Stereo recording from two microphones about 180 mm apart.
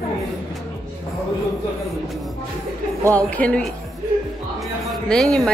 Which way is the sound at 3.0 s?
15° right (ahead or behind).